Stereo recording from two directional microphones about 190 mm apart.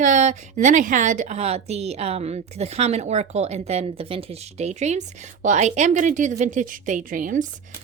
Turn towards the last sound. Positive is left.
turn(degrees=-45)  # may be behind; listen again after turning